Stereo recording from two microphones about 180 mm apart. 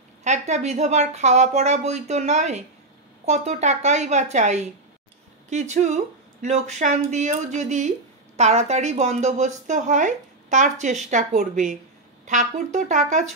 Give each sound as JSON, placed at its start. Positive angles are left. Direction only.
{"t": 0.2, "sound": "speech", "side_deg": -40}